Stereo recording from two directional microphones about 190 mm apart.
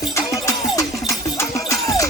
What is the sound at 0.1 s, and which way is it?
Music, 15° left (ahead or behind).